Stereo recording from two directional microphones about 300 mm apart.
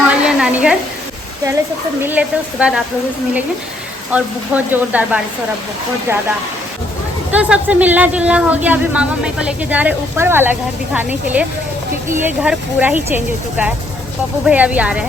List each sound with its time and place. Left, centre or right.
0.1 s sizzle: centre
2.0 s speech: centre
4.1 s speech: centre
7.3 s speech: centre